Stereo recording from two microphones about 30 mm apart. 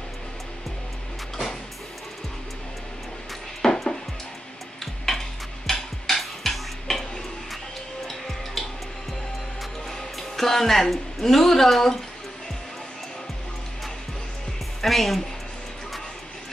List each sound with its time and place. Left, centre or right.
1.3 s music: centre
3.6 s music: centre
5.1 s stir: centre
5.7 s tick-tock: centre
8.1 s music: centre
10.1 s music: centre
10.9 s a woman's voice: centre
14.8 s speech: centre